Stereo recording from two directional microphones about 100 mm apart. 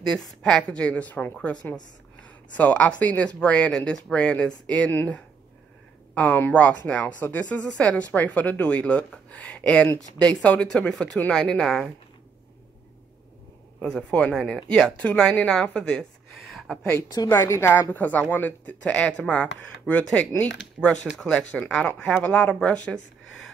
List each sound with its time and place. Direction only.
0.0 s speech: 5° left (ahead or behind)
2.2 s a sound: 15° left (ahead or behind)
3.0 s speech: 15° left (ahead or behind)
14.1 s speech: 10° left (ahead or behind)
17.3 s speech: 25° left (ahead or behind)